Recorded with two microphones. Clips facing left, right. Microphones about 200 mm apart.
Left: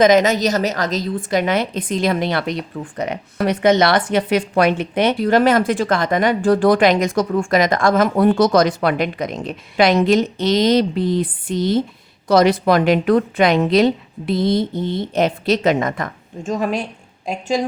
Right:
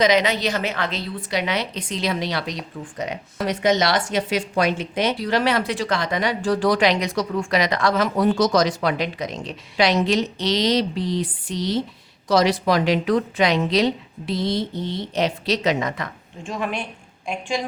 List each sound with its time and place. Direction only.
0.0 s a woman's voice: 45° left (ahead or behind)
16.5 s a woman's voice: 40° left (ahead or behind)